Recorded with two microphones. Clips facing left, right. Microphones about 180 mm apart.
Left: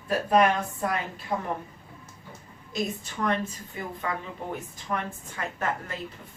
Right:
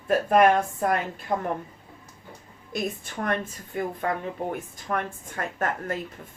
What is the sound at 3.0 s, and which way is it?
A woman's voice, 55° right (ahead or behind).